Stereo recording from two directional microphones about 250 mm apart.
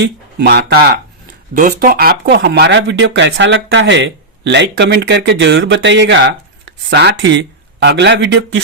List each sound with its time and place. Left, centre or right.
0.0 s speech: right